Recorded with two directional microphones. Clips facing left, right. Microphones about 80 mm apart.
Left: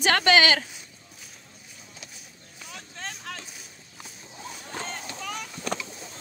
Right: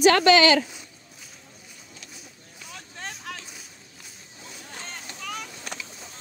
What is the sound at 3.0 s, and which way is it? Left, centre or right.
Vehicle, centre.